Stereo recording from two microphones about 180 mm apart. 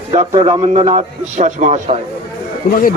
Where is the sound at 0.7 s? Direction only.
40° right (ahead or behind).